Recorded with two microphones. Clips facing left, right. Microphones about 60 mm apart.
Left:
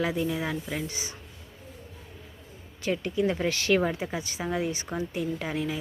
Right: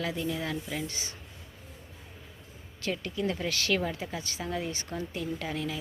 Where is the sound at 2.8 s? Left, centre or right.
Centre.